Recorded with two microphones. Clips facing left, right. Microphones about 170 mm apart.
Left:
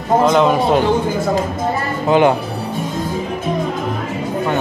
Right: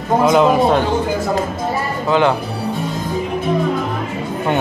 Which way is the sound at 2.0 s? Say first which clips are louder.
Left 3 dB; 15° left (ahead or behind).